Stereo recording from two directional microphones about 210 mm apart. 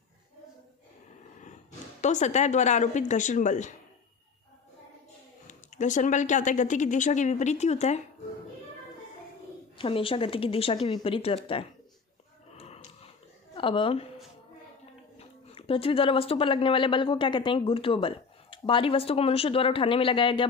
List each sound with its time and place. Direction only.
2.0 s speech: 35° left (ahead or behind)
5.5 s speech: 35° left (ahead or behind)
9.7 s speech: 25° left (ahead or behind)
12.5 s a sound: 30° left (ahead or behind)
13.6 s speech: 25° left (ahead or behind)
15.2 s speech: 30° left (ahead or behind)